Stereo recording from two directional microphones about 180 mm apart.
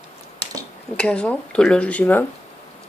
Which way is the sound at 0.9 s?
5° left (ahead or behind).